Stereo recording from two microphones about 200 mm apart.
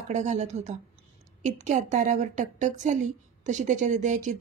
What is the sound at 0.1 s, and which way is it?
Speech, 35° right (ahead or behind).